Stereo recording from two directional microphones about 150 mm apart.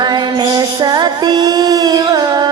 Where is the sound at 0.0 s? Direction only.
30° right (ahead or behind).